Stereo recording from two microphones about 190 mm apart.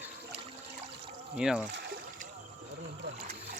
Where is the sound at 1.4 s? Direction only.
5° right (ahead or behind).